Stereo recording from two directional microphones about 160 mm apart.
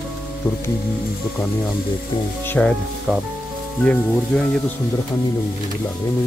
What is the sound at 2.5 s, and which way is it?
Speech, 5° left (ahead or behind).